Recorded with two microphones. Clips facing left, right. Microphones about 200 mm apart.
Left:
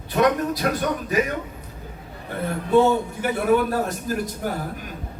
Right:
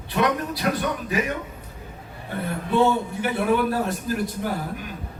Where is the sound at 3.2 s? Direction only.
45° left (ahead or behind).